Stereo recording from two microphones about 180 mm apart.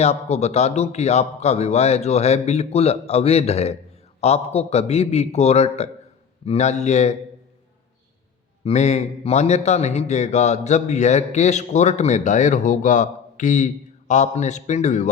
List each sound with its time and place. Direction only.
0.0 s a man's voice: 35° left (ahead or behind)
8.6 s a man's voice: 40° left (ahead or behind)